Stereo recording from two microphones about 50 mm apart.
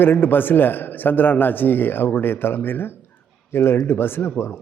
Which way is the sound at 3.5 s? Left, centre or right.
Left.